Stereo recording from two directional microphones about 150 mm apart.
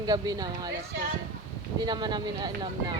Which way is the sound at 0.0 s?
25° right (ahead or behind).